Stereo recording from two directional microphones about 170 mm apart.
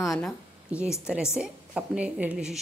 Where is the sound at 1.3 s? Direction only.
5° right (ahead or behind).